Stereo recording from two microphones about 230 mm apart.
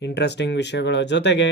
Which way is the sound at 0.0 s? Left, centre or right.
Left.